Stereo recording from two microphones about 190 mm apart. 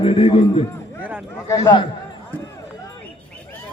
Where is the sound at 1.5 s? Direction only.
25° left (ahead or behind).